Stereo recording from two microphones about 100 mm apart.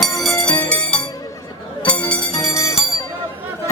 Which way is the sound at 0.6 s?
10° left (ahead or behind).